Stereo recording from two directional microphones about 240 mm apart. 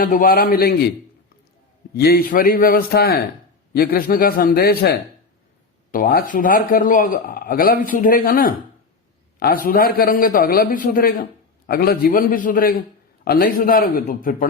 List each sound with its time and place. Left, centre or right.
0.0 s a man's voice: left
1.9 s a man's voice: left